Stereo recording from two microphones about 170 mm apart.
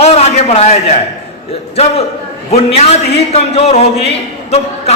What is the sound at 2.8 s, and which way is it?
A man's voice, 40° left (ahead or behind).